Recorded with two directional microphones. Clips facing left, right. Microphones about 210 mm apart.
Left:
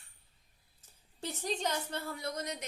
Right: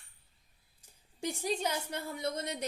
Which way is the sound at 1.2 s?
10° right (ahead or behind).